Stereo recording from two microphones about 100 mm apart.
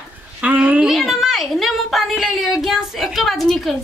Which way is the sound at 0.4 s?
15° right (ahead or behind).